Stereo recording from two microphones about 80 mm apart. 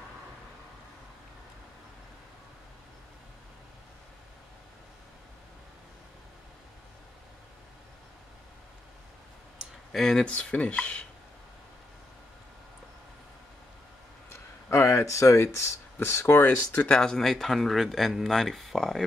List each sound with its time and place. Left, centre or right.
9.9 s speech: centre
14.3 s speech: left
16.8 s speech: centre